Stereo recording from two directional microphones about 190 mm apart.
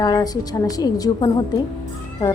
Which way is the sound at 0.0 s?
20° left (ahead or behind).